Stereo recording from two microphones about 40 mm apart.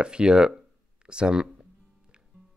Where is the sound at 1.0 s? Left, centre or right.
Right.